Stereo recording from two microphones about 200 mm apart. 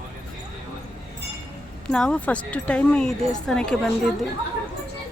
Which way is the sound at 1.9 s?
5° left (ahead or behind).